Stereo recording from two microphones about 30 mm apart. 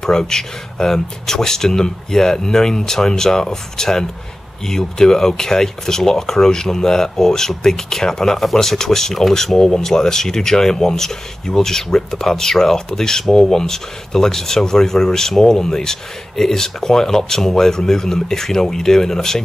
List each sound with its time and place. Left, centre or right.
0.0 s speech: centre